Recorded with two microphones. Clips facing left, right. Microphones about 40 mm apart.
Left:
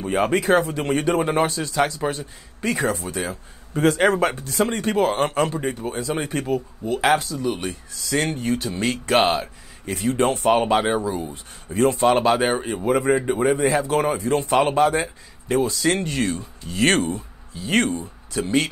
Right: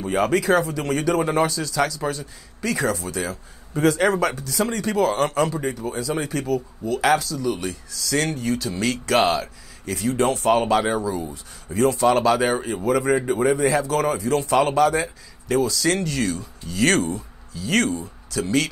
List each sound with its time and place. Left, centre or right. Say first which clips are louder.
0.1 s speech: left 1 dB; left